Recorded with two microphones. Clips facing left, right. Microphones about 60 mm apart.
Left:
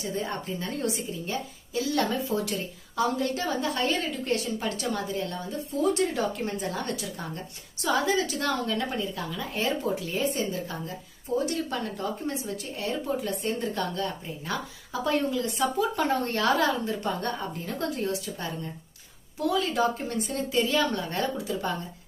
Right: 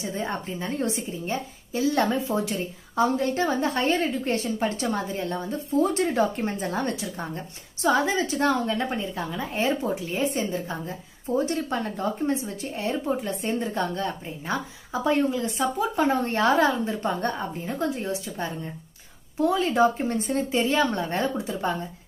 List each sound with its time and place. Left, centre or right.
0.0 s a woman's voice: right